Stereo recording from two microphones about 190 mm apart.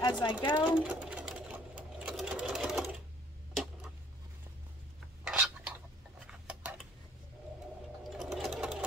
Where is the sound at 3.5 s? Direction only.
Centre (ahead or behind).